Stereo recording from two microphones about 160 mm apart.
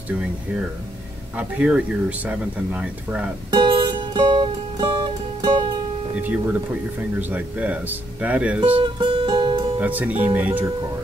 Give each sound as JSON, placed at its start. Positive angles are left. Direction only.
{"t": 1.3, "sound": "speech", "side_deg": -5}
{"t": 3.4, "sound": "music", "side_deg": -30}
{"t": 6.1, "sound": "speech", "side_deg": -10}
{"t": 8.7, "sound": "music", "side_deg": -35}
{"t": 9.8, "sound": "speech", "side_deg": -10}